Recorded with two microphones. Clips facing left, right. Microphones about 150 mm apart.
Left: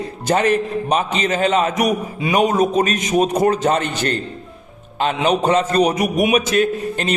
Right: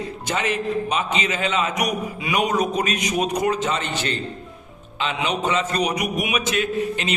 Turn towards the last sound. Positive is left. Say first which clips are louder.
# left 4 dB
turn(degrees=45)  # may be behind; listen again after turning